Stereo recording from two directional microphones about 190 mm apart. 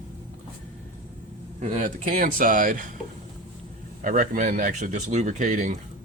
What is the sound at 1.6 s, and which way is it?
Speech, 40° right (ahead or behind).